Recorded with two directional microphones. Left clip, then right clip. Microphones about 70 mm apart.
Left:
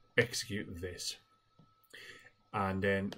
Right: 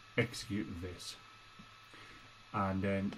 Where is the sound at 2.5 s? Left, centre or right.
Left.